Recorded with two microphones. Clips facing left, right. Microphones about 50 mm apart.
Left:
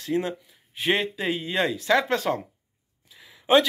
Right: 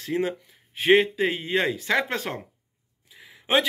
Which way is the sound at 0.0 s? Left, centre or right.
Right.